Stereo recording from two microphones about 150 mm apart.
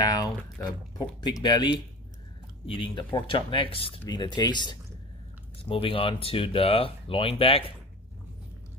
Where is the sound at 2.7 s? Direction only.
35° left (ahead or behind).